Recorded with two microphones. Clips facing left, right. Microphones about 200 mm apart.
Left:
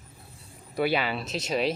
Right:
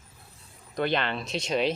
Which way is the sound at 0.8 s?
5° left (ahead or behind).